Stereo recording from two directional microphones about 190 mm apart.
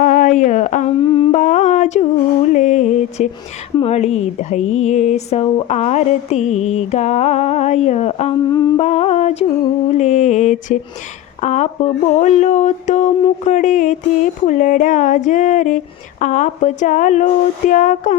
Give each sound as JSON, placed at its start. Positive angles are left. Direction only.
{"t": 0.0, "sound": "a sound", "side_deg": 40}
{"t": 1.0, "sound": "humming", "side_deg": 25}
{"t": 2.5, "sound": "music", "side_deg": 40}
{"t": 3.8, "sound": "speech", "side_deg": 35}
{"t": 8.4, "sound": "humming", "side_deg": 20}
{"t": 8.8, "sound": "a sound", "side_deg": 35}
{"t": 9.9, "sound": "speech", "side_deg": 35}